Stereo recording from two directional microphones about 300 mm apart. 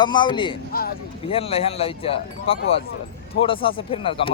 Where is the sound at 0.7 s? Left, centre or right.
Left.